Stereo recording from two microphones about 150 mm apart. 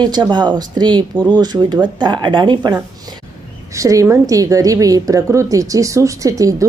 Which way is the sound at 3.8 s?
20° right (ahead or behind).